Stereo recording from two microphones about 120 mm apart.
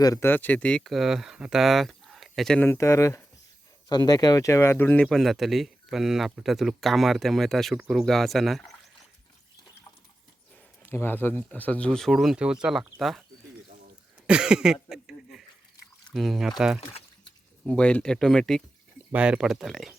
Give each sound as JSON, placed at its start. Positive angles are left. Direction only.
{"t": 0.0, "sound": "speech", "side_deg": 30}
{"t": 0.3, "sound": "speech", "side_deg": 15}
{"t": 2.6, "sound": "speech", "side_deg": 20}
{"t": 5.0, "sound": "speech", "side_deg": 0}
{"t": 10.8, "sound": "speech", "side_deg": 15}
{"t": 14.3, "sound": "a sound", "side_deg": -10}
{"t": 16.1, "sound": "speech", "side_deg": 0}
{"t": 17.7, "sound": "speech", "side_deg": 10}
{"t": 19.1, "sound": "speech", "side_deg": -10}